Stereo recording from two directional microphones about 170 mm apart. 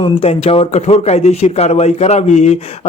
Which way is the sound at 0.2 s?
35° left (ahead or behind).